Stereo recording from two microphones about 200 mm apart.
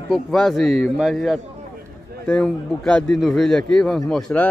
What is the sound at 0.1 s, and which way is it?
A man's voice, centre (ahead or behind).